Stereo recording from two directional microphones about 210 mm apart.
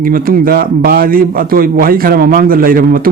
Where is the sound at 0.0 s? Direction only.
45° right (ahead or behind).